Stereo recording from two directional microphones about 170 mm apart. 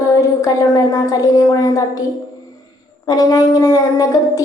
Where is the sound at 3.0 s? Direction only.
20° left (ahead or behind).